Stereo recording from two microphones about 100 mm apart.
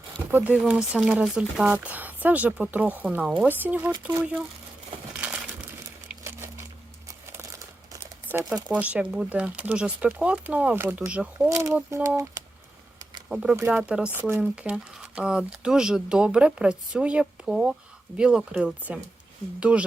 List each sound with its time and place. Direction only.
0.3 s speech: 15° right (ahead or behind)
0.6 s speech: 5° right (ahead or behind)
1.7 s speech: 15° right (ahead or behind)
5.1 s crushing: 15° right (ahead or behind)
7.3 s crumpling: 35° right (ahead or behind)
8.7 s speech: 15° right (ahead or behind)
12.0 s speech: 35° right (ahead or behind)
13.2 s speech: 5° right (ahead or behind)
14.1 s speech: 20° right (ahead or behind)